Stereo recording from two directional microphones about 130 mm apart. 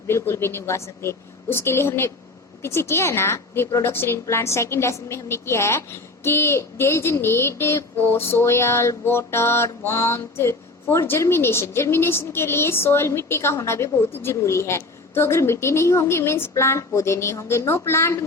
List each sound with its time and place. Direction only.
0.1 s a woman's voice: 20° left (ahead or behind)